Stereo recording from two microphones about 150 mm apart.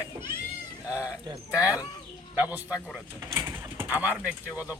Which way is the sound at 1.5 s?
10° right (ahead or behind).